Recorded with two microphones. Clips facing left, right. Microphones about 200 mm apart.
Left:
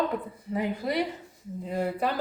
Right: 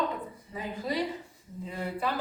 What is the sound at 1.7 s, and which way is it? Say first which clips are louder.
Speech: left 5 dB; 45° left (ahead or behind).